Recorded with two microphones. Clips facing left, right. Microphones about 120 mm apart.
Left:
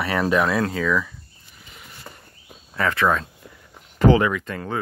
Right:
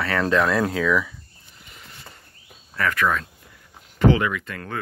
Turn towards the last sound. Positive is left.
turn(degrees=35)  # may be behind; listen again after turning